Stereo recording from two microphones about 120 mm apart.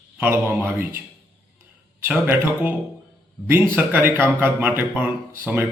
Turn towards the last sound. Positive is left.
turn(degrees=-20)  # may be behind; listen again after turning